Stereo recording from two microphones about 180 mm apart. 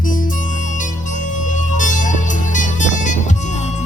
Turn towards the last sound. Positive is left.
turn(degrees=45)  # may be behind; listen again after turning